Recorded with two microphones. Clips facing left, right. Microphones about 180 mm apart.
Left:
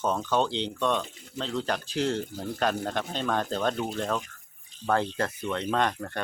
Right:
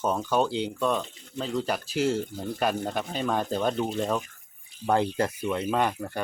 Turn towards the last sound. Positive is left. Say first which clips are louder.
# right 1 dB
turn(degrees=-10)  # may be behind; listen again after turning